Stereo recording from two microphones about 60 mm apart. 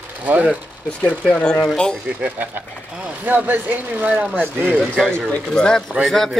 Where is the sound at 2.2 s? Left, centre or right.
Right.